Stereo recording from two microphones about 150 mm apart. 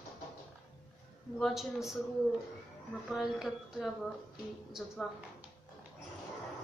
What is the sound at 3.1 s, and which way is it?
Speech, 5° right (ahead or behind).